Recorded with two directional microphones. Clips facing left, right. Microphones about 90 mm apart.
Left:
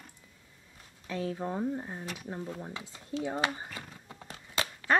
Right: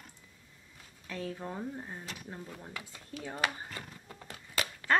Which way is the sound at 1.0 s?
15° left (ahead or behind).